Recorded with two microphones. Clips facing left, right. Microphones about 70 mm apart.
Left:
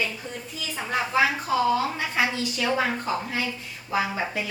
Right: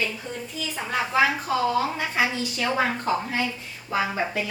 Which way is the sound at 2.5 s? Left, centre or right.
Right.